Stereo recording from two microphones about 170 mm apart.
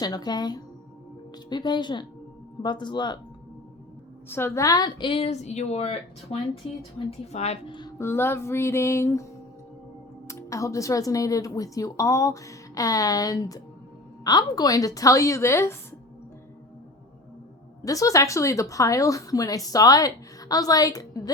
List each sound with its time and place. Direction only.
0.0 s speech: 25° left (ahead or behind)
4.3 s a woman's voice: 15° left (ahead or behind)
10.2 s speech: 20° left (ahead or behind)
17.8 s speech: 20° left (ahead or behind)